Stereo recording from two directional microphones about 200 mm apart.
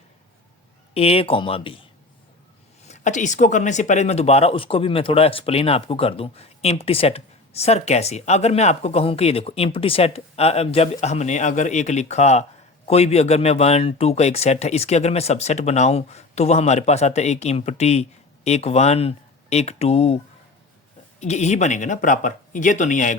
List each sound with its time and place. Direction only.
0.9 s speech: 30° left (ahead or behind)
2.8 s speech: 35° left (ahead or behind)
21.2 s speech: 35° left (ahead or behind)